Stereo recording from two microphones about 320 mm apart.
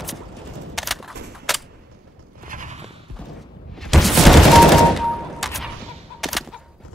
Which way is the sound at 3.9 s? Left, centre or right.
Centre.